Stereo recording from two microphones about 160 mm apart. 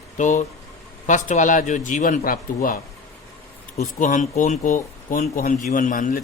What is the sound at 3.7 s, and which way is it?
Speech, 50° left (ahead or behind).